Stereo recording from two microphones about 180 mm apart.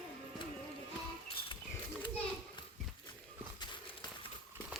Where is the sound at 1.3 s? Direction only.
30° left (ahead or behind).